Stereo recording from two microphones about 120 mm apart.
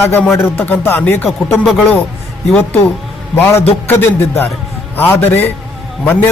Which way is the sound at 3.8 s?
20° left (ahead or behind).